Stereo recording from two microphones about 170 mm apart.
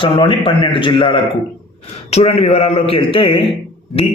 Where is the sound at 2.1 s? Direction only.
40° left (ahead or behind).